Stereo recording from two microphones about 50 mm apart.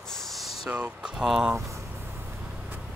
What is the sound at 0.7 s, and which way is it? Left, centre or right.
Speech, right.